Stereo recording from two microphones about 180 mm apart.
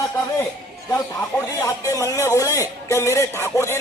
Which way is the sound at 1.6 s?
20° left (ahead or behind).